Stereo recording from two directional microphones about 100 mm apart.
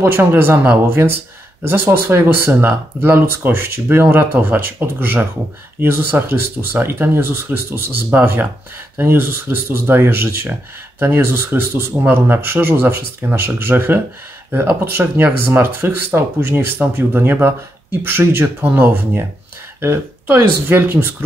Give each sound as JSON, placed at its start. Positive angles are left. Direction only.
{"t": 0.0, "sound": "speech", "side_deg": -25}